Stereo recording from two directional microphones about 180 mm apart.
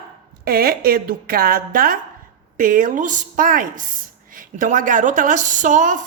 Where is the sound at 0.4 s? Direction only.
55° right (ahead or behind).